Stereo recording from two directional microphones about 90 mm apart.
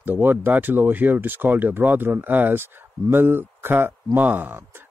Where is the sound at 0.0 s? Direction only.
20° right (ahead or behind).